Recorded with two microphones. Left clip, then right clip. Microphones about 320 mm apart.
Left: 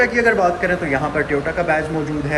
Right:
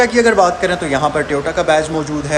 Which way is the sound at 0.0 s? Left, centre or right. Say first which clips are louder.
Right 4 dB; centre.